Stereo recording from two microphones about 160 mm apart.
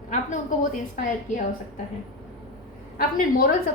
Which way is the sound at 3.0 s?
60° left (ahead or behind).